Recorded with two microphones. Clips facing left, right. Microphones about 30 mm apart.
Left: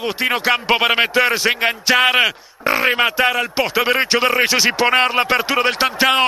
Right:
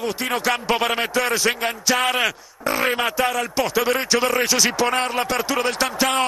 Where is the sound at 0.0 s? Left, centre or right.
Left.